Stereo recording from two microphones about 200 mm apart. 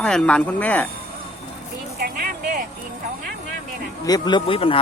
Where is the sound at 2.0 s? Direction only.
45° right (ahead or behind).